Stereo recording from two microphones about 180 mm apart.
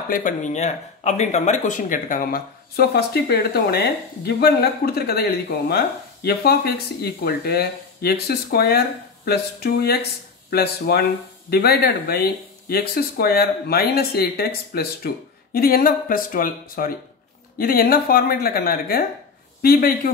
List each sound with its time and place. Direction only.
0.1 s speech: 45° left (ahead or behind)